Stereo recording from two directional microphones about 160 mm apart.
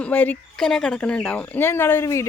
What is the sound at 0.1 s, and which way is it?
Speech, 10° left (ahead or behind).